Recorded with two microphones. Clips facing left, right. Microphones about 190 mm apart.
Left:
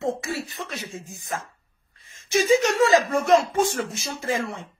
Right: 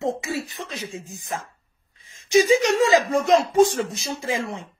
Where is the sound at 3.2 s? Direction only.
15° right (ahead or behind).